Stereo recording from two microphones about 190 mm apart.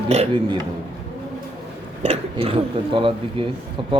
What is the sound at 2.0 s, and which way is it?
A man's voice, 30° right (ahead or behind).